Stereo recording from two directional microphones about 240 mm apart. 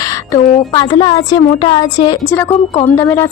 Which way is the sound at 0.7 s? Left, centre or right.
Centre.